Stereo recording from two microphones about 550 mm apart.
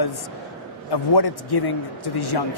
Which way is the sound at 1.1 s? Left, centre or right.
Left.